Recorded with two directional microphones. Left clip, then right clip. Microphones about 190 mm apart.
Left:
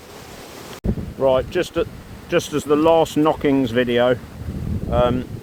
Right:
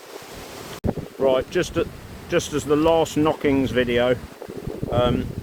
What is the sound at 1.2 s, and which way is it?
Speech, centre (ahead or behind).